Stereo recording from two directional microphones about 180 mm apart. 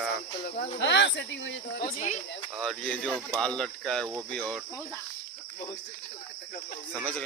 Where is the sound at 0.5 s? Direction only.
40° left (ahead or behind).